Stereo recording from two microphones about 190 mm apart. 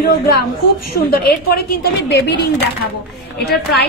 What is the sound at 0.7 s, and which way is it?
A woman's voice, 50° left (ahead or behind).